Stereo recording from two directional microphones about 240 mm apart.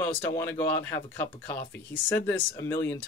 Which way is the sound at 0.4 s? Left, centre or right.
Centre.